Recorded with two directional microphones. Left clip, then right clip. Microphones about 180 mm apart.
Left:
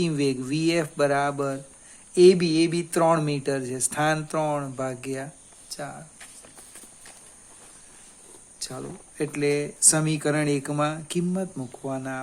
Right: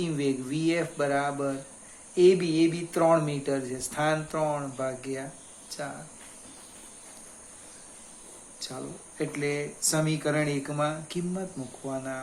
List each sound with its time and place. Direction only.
0.0 s speech: 55° left (ahead or behind)
8.5 s speech: 55° left (ahead or behind)